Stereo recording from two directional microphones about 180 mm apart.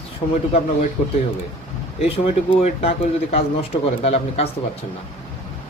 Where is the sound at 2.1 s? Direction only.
30° left (ahead or behind).